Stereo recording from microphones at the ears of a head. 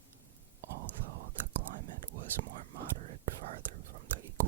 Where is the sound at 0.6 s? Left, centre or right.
Right.